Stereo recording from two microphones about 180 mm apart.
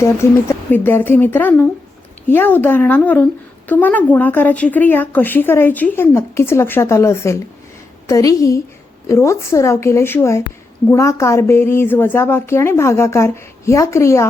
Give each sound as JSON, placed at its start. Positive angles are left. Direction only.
{"t": 0.0, "sound": "speech", "side_deg": 15}